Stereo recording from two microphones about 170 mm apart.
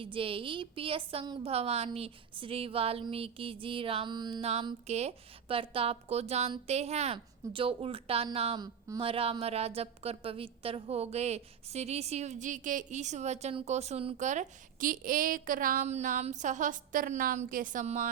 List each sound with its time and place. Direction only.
0.0 s a woman's voice: 30° right (ahead or behind)
4.9 s a woman's voice: 40° right (ahead or behind)